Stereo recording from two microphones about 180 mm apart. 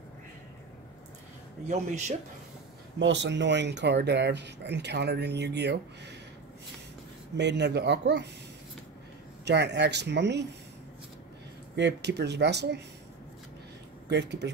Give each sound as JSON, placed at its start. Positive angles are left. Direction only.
{"t": 1.7, "sound": "a man's voice", "side_deg": -40}
{"t": 3.0, "sound": "speech", "side_deg": -80}
{"t": 7.3, "sound": "speech", "side_deg": -75}
{"t": 9.4, "sound": "speech", "side_deg": -70}
{"t": 11.7, "sound": "speech", "side_deg": -70}
{"t": 14.0, "sound": "speech", "side_deg": -70}